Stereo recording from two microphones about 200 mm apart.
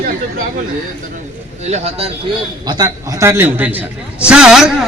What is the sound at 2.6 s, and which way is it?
A man's voice, 15° right (ahead or behind).